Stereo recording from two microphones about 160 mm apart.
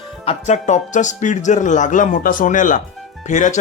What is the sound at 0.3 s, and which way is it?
A man's voice, 45° left (ahead or behind).